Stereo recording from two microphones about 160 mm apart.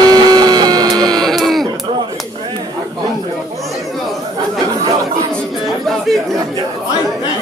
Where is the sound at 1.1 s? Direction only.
Centre (ahead or behind).